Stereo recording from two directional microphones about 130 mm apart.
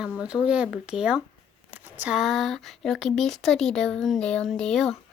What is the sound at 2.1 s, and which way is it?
Speech, centre (ahead or behind).